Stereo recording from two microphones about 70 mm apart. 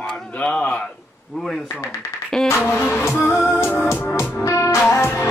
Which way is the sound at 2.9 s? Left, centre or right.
Left.